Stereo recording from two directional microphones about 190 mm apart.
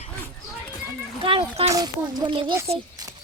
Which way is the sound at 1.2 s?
30° right (ahead or behind).